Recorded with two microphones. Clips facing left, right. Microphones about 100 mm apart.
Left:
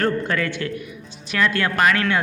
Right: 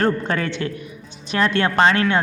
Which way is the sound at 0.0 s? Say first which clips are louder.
Right 1 dB; 30° right (ahead or behind).